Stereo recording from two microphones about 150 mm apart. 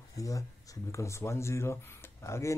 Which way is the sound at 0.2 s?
20° left (ahead or behind).